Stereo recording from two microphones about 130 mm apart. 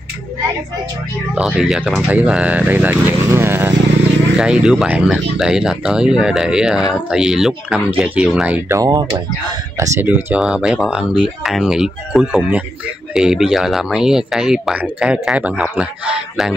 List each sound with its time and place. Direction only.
1.3 s speech: 5° right (ahead or behind)
4.4 s speech: 5° right (ahead or behind)
8.7 s speech: 30° right (ahead or behind)
10.0 s speech: 10° right (ahead or behind)